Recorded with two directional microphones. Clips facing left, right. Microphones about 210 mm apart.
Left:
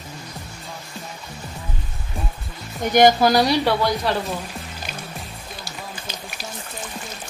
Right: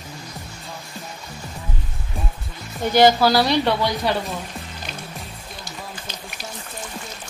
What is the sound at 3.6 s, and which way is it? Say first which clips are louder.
Speech: left 1 dB; centre (ahead or behind).